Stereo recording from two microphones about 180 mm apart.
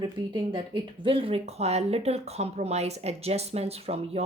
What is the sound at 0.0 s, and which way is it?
Speech, 25° right (ahead or behind).